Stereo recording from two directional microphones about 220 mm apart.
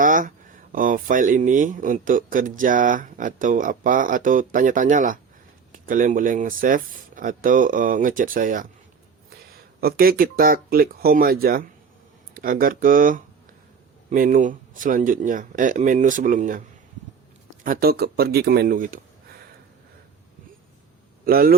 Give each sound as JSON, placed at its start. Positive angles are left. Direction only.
{"t": 0.0, "sound": "speech", "side_deg": -35}
{"t": 9.8, "sound": "speech", "side_deg": -40}
{"t": 21.2, "sound": "speech", "side_deg": -40}